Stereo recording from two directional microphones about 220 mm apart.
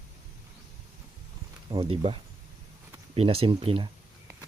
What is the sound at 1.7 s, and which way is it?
Speech, 25° right (ahead or behind).